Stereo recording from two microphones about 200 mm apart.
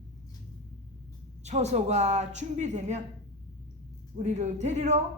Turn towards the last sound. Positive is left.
turn(degrees=-35)  # may be behind; listen again after turning